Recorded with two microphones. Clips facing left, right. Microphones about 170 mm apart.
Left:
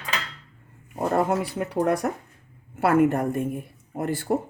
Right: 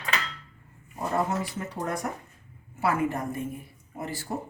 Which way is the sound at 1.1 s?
65° left (ahead or behind).